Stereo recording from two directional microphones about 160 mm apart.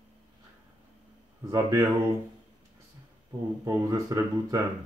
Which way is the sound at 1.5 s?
20° right (ahead or behind).